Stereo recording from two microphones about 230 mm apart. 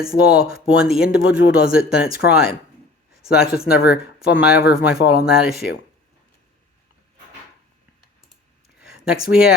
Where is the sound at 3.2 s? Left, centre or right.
Left.